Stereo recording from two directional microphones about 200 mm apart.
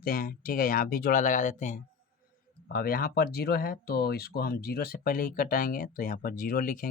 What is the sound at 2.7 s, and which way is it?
Speech, 50° left (ahead or behind).